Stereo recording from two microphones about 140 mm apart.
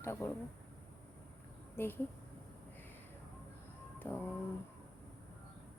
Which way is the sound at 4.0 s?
15° left (ahead or behind).